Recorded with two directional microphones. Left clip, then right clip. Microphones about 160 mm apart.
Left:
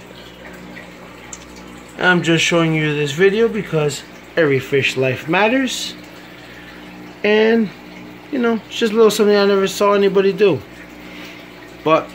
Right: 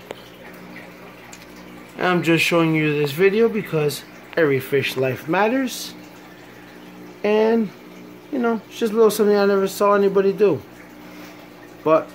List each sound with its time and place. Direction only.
2.0 s speech: 15° right (ahead or behind); by 5.9 s centre (ahead or behind)
7.2 s speech: centre (ahead or behind)
11.9 s speech: 5° right (ahead or behind)